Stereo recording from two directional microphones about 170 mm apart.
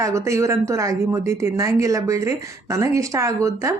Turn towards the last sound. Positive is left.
turn(degrees=-15)  # may be behind; listen again after turning